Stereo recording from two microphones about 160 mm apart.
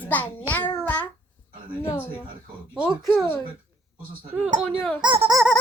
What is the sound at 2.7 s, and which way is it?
Speech, centre (ahead or behind).